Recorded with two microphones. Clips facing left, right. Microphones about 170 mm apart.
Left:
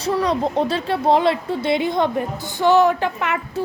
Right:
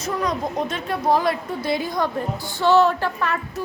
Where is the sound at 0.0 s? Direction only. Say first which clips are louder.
Left 5 dB; 30° left (ahead or behind).